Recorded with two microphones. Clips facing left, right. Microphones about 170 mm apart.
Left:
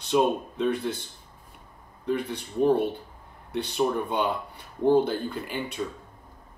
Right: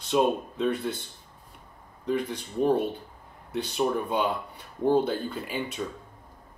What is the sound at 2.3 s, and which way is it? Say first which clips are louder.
Speech: left 4 dB; 60° left (ahead or behind).